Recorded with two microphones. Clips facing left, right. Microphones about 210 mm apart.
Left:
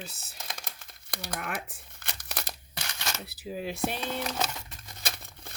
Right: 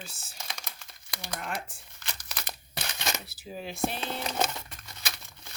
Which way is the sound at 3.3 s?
60° left (ahead or behind).